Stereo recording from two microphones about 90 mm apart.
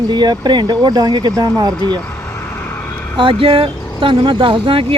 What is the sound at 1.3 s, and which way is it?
Speech, 35° right (ahead or behind).